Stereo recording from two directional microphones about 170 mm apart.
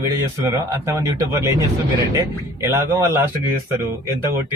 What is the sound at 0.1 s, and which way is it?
Speech, 15° right (ahead or behind).